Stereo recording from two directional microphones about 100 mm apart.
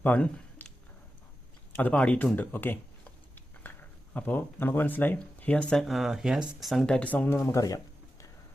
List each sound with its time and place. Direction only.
0.0 s a sound: 15° left (ahead or behind)
1.7 s speech: 15° left (ahead or behind)
5.9 s speech: centre (ahead or behind); by 7.6 s 25° left (ahead or behind)